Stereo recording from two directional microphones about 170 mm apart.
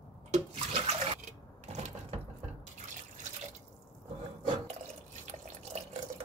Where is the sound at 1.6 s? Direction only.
40° right (ahead or behind).